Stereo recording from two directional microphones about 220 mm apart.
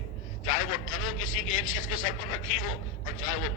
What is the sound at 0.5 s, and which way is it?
A man's voice, 65° left (ahead or behind).